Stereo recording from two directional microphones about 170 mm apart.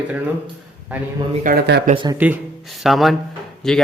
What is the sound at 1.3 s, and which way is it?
Speech, 45° right (ahead or behind).